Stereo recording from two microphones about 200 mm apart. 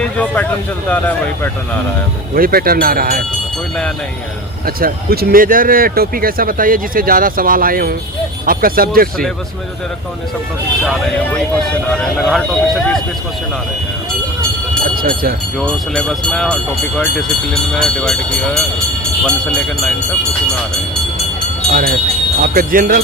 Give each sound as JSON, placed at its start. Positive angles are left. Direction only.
{"t": 0.0, "sound": "speech", "side_deg": 5}
{"t": 2.3, "sound": "speech", "side_deg": -50}
{"t": 4.6, "sound": "speech", "side_deg": -50}
{"t": 11.9, "sound": "speech", "side_deg": 0}
{"t": 15.0, "sound": "speech", "side_deg": -45}
{"t": 15.6, "sound": "speech", "side_deg": 5}
{"t": 21.7, "sound": "speech", "side_deg": -45}